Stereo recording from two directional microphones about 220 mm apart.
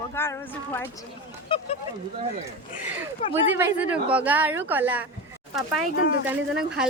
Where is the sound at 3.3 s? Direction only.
10° right (ahead or behind).